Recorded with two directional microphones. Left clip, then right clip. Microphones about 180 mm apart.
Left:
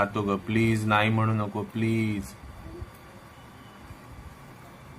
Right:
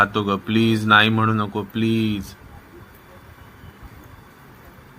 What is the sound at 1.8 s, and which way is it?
Speech, 15° left (ahead or behind).